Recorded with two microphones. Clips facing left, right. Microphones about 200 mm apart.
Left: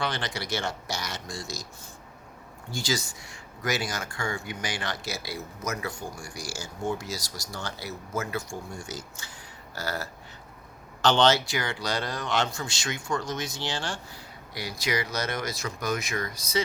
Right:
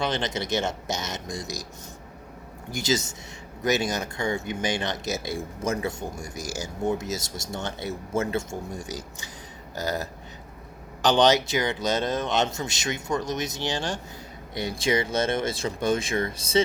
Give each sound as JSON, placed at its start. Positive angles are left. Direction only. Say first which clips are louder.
{"t": 0.0, "sound": "speech", "louder": "right 4 dB", "side_deg": -20}
{"t": 2.7, "sound": "speech", "louder": "right 4 dB", "side_deg": -20}